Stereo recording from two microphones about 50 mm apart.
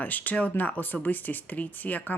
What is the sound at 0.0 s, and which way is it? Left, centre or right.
Speech, left.